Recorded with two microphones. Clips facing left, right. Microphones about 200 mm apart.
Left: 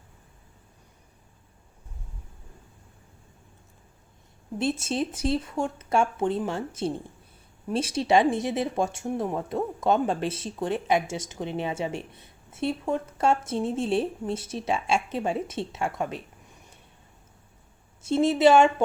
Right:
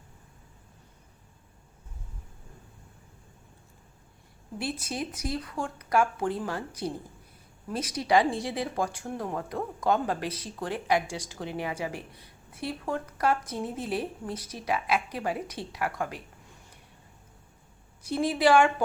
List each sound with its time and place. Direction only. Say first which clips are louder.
4.5 s speech: left 6 dB; 25° left (ahead or behind)
18.0 s speech: left 5 dB; 25° left (ahead or behind)